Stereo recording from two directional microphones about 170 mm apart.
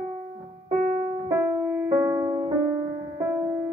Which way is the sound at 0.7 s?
45° right (ahead or behind).